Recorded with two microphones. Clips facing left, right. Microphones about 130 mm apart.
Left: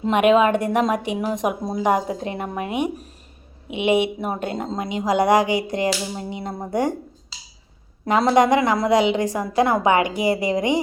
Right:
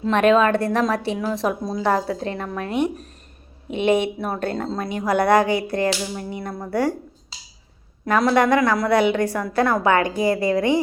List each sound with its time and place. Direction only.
0.0 s a woman's voice: 15° left (ahead or behind)
8.0 s a woman's voice: 20° left (ahead or behind)